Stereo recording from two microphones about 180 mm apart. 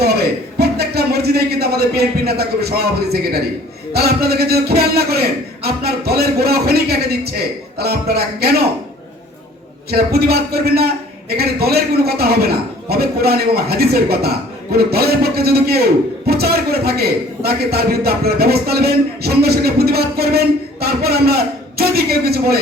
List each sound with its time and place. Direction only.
0.0 s a sound: 60° right (ahead or behind)
3.9 s a man's voice: 60° right (ahead or behind)
9.9 s a man's voice: 60° right (ahead or behind)